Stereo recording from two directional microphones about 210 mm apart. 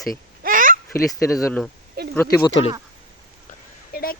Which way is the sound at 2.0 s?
50° right (ahead or behind).